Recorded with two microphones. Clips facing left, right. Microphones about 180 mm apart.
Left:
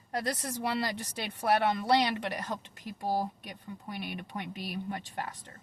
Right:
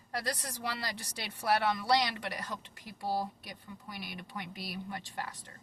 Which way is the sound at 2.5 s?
35° left (ahead or behind).